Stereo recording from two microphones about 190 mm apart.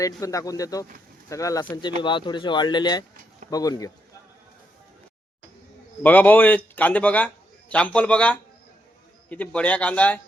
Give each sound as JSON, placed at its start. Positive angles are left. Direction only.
{"t": 0.0, "sound": "speech", "side_deg": 15}
{"t": 6.0, "sound": "speech", "side_deg": 10}